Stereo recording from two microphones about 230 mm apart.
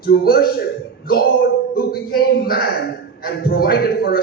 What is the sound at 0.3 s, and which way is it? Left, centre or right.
A man's voice, left.